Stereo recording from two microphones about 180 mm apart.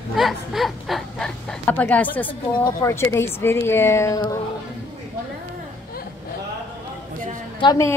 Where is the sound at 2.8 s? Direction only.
15° left (ahead or behind).